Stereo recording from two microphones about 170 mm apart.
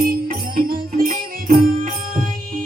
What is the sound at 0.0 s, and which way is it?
Music, 60° right (ahead or behind).